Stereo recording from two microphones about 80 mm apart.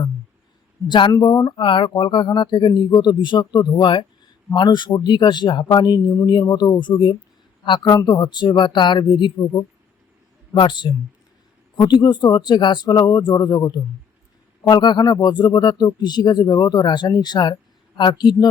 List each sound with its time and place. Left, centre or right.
0.9 s a man's voice: left
1.4 s speech: left
2.9 s speech: left
7.6 s a man's voice: left
7.9 s speech: left
11.8 s speech: left
14.6 s speech: left